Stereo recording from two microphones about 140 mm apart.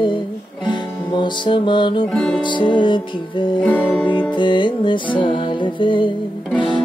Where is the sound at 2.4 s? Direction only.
35° left (ahead or behind).